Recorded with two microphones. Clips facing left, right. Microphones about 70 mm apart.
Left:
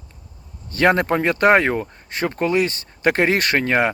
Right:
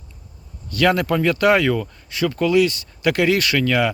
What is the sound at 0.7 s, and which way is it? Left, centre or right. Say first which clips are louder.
Speech: left 1 dB; left.